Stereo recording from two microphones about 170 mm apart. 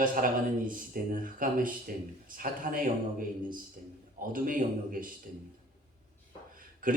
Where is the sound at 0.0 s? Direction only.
55° right (ahead or behind).